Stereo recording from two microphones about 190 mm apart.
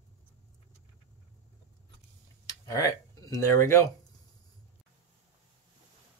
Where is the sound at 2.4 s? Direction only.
20° left (ahead or behind).